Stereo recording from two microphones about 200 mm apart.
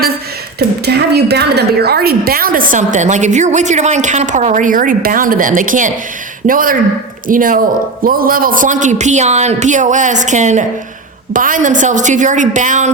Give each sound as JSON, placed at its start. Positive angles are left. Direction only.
{"t": 0.9, "sound": "a woman's voice", "side_deg": -55}